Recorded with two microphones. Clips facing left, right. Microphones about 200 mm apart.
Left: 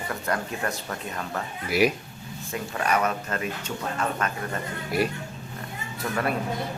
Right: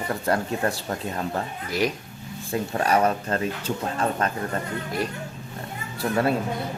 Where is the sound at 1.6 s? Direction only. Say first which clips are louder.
Left 4 dB; 10° left (ahead or behind).